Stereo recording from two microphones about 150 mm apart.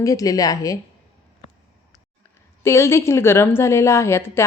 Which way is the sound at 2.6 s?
20° left (ahead or behind).